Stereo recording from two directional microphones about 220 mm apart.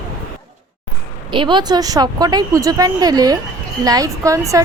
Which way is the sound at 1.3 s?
20° right (ahead or behind).